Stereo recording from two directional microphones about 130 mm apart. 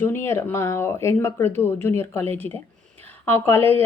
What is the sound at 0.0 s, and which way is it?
A woman's voice, 20° left (ahead or behind).